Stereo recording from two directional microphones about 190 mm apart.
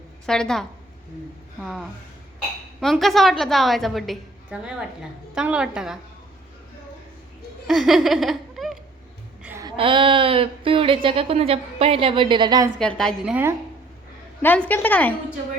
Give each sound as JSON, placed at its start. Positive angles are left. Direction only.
{"t": 0.3, "sound": "a woman's voice", "side_deg": 5}
{"t": 1.6, "sound": "a woman's voice", "side_deg": 0}
{"t": 7.7, "sound": "laughter", "side_deg": 0}
{"t": 9.4, "sound": "a sound", "side_deg": -15}
{"t": 9.7, "sound": "speech", "side_deg": -25}
{"t": 12.8, "sound": "a woman's voice", "side_deg": 5}
{"t": 14.4, "sound": "a woman's voice", "side_deg": 10}